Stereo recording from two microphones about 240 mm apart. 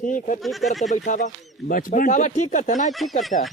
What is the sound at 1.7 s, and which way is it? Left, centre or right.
Speech, left.